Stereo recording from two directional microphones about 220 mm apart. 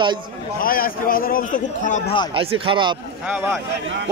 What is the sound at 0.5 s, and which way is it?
A man's voice, 40° left (ahead or behind).